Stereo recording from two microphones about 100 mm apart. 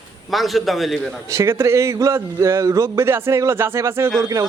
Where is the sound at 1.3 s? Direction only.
30° right (ahead or behind).